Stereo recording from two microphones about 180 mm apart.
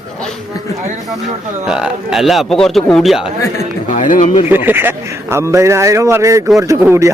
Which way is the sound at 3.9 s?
45° left (ahead or behind).